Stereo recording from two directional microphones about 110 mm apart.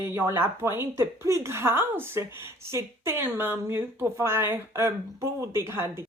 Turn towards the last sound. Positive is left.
turn(degrees=-25)  # may be behind; listen again after turning